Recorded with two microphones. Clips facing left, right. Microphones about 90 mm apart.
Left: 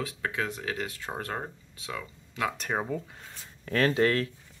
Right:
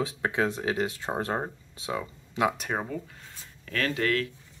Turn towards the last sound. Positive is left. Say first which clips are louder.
# left 3 dB
turn(degrees=30)  # may be behind; listen again after turning